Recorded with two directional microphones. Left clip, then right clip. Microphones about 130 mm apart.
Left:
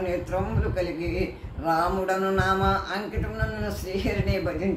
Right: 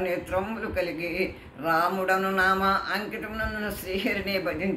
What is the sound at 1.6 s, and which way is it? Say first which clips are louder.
Speech: even; 25° right (ahead or behind).